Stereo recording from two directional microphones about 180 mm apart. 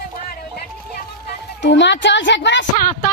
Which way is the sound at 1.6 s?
80° left.